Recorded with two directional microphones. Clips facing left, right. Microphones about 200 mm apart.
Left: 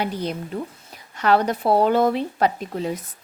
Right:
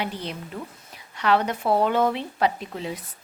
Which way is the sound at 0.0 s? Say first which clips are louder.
Left 5 dB; 40° left (ahead or behind).